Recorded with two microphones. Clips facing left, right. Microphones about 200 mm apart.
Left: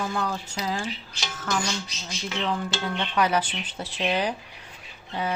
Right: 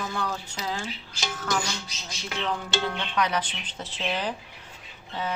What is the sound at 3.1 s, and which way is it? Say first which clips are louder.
Speech: left 5 dB; 10° left (ahead or behind).